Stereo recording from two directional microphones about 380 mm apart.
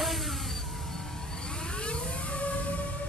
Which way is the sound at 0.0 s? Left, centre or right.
Centre.